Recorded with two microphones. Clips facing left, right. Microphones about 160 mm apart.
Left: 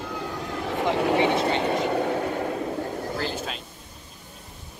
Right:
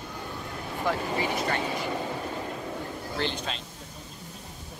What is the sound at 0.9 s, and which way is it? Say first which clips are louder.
Speech: left 8 dB; 70° left (ahead or behind).